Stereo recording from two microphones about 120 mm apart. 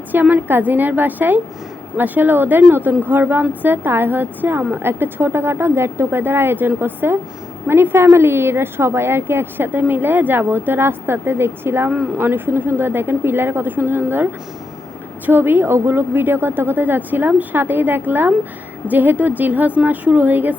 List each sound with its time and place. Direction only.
0.1 s a woman's voice: 15° right (ahead or behind)
15.3 s a woman's voice: 15° right (ahead or behind)